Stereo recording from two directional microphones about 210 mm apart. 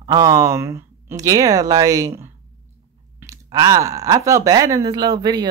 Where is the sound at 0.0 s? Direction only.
20° right (ahead or behind).